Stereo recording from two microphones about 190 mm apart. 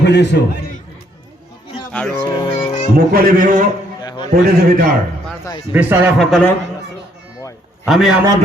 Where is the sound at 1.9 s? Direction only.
5° left (ahead or behind).